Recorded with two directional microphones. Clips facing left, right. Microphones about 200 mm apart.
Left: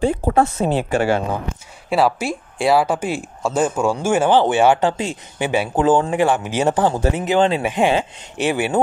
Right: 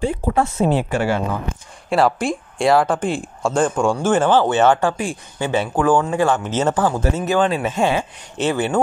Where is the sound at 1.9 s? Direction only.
5° left (ahead or behind).